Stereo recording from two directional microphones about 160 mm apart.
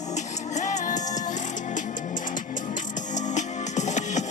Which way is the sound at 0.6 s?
50° left (ahead or behind).